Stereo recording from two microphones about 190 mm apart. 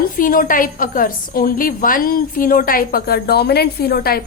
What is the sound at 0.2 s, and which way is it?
A woman's voice, 45° left (ahead or behind).